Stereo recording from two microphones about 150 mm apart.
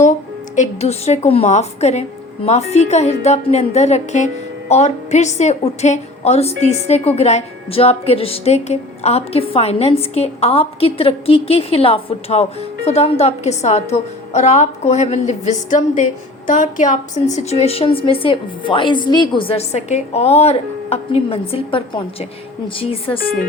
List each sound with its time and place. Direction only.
0.5 s a woman's voice: 50° left (ahead or behind)